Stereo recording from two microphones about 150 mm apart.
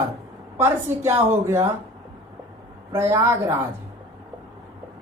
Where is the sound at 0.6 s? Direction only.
15° right (ahead or behind).